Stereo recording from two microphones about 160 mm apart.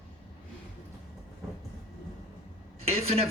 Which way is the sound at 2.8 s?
40° right (ahead or behind).